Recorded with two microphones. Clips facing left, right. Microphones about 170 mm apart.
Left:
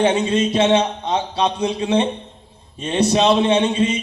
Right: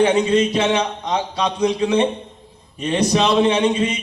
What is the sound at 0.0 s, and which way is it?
A man's voice, 30° left (ahead or behind).